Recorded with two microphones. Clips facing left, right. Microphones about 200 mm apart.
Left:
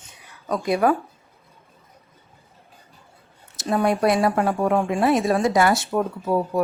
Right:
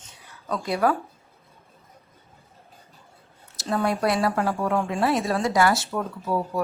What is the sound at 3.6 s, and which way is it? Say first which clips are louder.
A woman's voice: left 4 dB; 20° left (ahead or behind).